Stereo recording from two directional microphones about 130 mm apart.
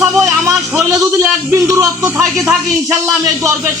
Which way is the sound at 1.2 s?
20° right (ahead or behind).